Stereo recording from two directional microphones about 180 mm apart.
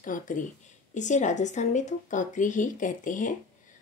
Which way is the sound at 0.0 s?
45° left (ahead or behind).